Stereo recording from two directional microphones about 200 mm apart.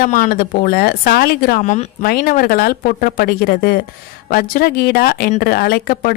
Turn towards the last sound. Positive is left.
turn(degrees=50)  # may be behind; listen again after turning